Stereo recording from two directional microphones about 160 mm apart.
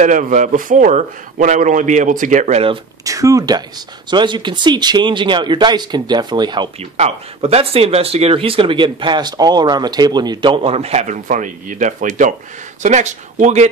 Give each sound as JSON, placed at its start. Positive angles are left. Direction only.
{"t": 0.0, "sound": "a man's voice", "side_deg": -55}
{"t": 3.0, "sound": "speech", "side_deg": -20}
{"t": 7.0, "sound": "a man's voice", "side_deg": -40}